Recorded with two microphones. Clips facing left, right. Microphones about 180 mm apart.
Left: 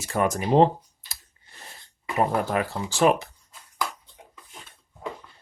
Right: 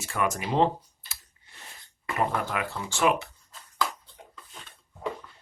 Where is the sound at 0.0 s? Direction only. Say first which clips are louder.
Left 4 dB; 35° left (ahead or behind).